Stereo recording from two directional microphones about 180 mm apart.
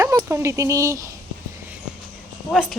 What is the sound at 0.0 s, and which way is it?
Speech, 20° right (ahead or behind).